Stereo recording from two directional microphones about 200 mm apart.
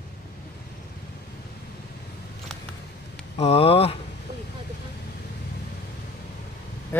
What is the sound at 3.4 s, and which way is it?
Speech, 30° left (ahead or behind).